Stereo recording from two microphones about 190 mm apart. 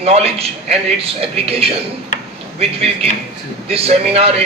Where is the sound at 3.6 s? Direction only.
30° right (ahead or behind).